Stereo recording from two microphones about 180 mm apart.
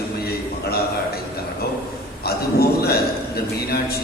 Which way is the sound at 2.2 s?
60° left (ahead or behind).